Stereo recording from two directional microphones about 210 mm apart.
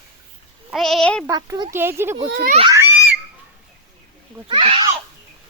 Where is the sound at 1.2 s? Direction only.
15° right (ahead or behind).